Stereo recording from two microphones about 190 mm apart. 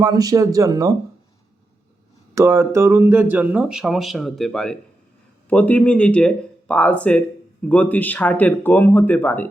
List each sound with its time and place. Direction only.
0.0 s speech: 20° right (ahead or behind)
2.3 s speech: 15° right (ahead or behind); by 9.5 s 10° left (ahead or behind)